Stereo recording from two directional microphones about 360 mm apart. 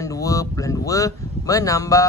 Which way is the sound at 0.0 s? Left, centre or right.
Centre.